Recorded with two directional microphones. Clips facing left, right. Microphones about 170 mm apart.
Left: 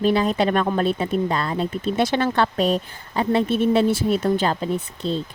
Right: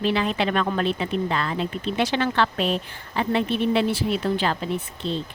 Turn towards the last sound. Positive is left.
turn(degrees=40)  # may be behind; listen again after turning